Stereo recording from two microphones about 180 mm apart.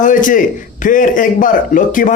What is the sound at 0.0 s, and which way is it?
A man's voice, 45° left (ahead or behind).